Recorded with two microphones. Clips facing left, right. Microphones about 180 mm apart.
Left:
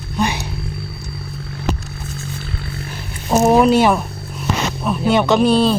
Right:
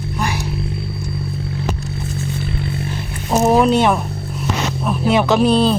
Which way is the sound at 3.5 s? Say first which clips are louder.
Left 1 dB; 5° left (ahead or behind).